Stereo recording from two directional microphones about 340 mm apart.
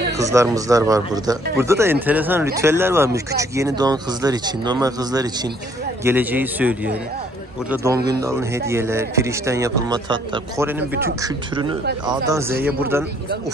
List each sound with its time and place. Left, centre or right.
0.2 s a man's voice: centre
12.1 s speech: centre